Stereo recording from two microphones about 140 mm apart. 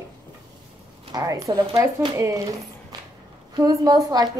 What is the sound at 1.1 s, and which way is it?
A woman's voice, 25° right (ahead or behind).